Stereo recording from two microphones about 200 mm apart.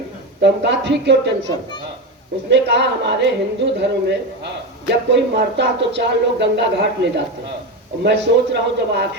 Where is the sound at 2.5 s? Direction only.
60° right (ahead or behind).